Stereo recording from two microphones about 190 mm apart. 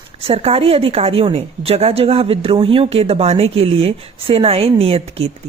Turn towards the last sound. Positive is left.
turn(degrees=-30)  # may be behind; listen again after turning